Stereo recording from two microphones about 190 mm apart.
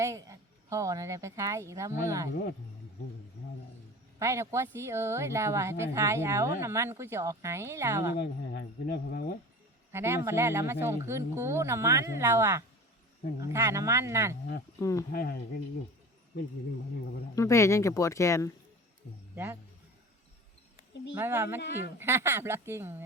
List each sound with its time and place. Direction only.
0.0 s speech: 15° right (ahead or behind)
4.2 s speech: 15° right (ahead or behind)
8.1 s speech: 55° left (ahead or behind)
9.9 s speech: 15° right (ahead or behind)
14.8 s speech: 15° left (ahead or behind)
15.1 s speech: 50° left (ahead or behind)
17.3 s speech: 15° left (ahead or behind)
21.2 s speech: 10° right (ahead or behind)